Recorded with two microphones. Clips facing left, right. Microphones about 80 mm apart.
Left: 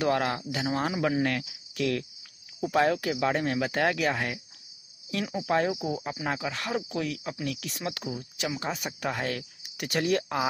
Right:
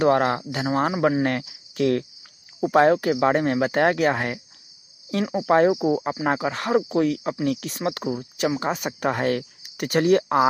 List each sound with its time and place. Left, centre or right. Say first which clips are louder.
0.0 s speech: right 7 dB; right